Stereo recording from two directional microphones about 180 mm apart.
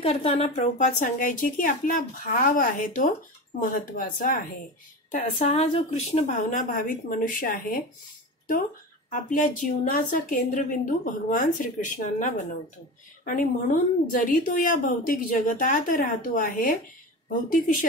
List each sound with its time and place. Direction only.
0.0 s a woman's voice: 35° left (ahead or behind); by 7.8 s 55° left (ahead or behind)
9.1 s a woman's voice: 45° left (ahead or behind)